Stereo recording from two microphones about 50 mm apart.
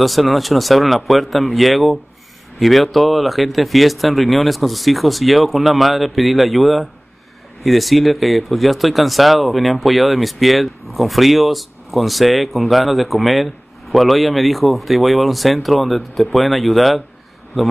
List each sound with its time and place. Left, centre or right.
0.0 s speech: centre